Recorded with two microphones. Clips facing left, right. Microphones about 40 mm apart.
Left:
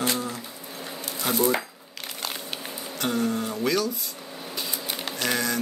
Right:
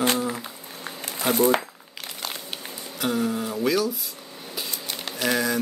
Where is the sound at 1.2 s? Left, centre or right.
Centre.